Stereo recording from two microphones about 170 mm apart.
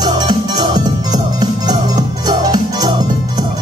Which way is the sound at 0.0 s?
25° right (ahead or behind).